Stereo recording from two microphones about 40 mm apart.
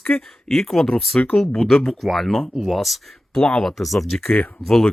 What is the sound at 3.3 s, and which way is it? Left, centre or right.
Speech, left.